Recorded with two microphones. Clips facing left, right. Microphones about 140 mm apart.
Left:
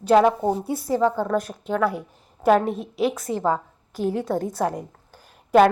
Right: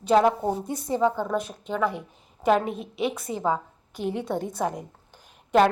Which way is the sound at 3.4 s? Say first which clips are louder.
Left 1 dB; 5° right (ahead or behind).